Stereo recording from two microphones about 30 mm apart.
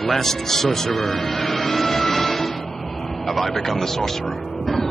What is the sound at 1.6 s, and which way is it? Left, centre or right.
Music, centre.